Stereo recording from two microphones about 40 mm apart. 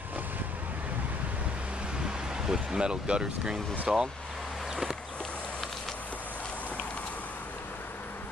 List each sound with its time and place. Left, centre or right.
2.4 s speech: centre